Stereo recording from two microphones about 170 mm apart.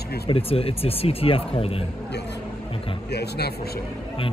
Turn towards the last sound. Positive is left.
turn(degrees=70)  # may be behind; listen again after turning